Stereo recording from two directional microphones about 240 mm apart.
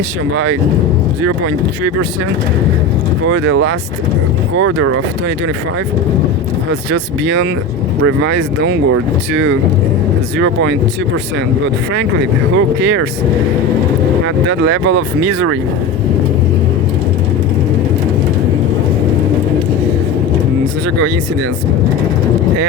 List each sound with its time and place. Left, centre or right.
3.2 s speech: right
6.9 s speech: right
12.5 s speech: right
14.6 s speech: right